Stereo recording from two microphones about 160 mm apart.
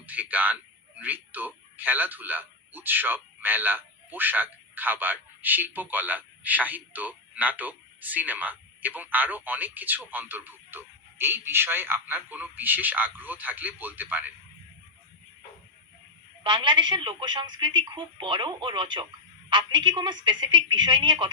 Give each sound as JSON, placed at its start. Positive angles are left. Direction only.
{"t": 0.0, "sound": "speech", "side_deg": -10}
{"t": 16.4, "sound": "a woman's voice", "side_deg": -30}